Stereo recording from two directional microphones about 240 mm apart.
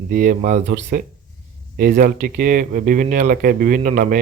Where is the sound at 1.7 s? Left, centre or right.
Right.